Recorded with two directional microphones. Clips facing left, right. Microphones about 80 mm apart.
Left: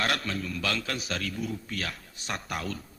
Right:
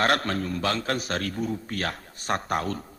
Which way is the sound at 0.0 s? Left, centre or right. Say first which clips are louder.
Right 6 dB; right.